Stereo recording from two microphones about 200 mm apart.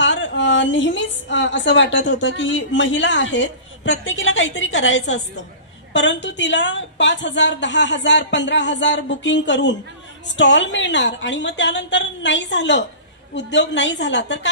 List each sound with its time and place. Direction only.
0.0 s a woman's voice: 65° left (ahead or behind)